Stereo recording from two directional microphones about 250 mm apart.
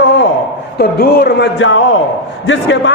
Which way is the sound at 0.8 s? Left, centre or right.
Left.